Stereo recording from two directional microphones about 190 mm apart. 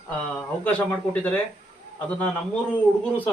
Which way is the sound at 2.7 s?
10° left (ahead or behind).